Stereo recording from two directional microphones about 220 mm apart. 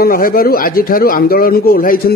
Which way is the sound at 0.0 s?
40° left (ahead or behind).